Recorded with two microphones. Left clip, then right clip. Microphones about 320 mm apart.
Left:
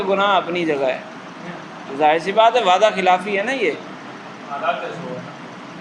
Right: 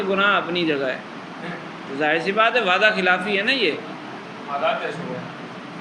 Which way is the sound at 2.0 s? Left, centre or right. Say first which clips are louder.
Left 5 dB; centre.